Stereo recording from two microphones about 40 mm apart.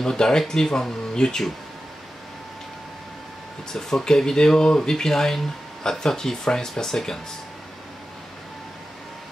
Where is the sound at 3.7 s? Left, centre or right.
Centre.